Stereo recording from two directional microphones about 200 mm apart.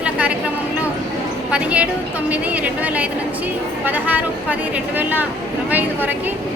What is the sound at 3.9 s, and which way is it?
Speech, 10° right (ahead or behind).